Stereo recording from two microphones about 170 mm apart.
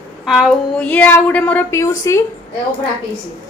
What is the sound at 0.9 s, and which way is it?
A woman's voice, 10° left (ahead or behind).